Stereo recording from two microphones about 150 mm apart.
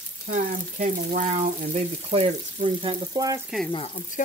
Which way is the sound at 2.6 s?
35° right (ahead or behind).